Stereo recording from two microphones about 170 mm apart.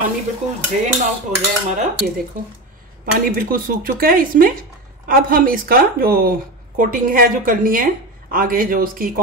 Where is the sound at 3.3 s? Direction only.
55° right (ahead or behind).